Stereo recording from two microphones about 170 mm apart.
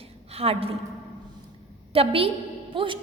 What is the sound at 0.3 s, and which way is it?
Speech, 35° right (ahead or behind).